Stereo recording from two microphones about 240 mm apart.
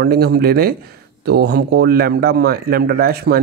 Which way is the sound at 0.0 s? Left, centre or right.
Right.